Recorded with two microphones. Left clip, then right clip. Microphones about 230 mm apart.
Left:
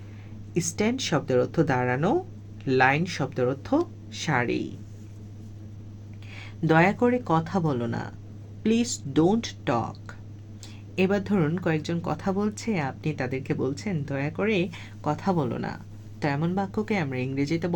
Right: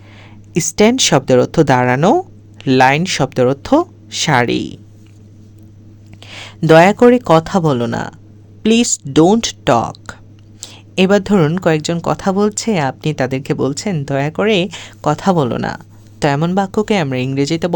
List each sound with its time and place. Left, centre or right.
0.5 s speech: right
6.2 s speech: right